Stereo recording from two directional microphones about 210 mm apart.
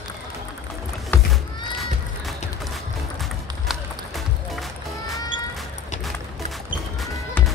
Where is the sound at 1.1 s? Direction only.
5° left (ahead or behind).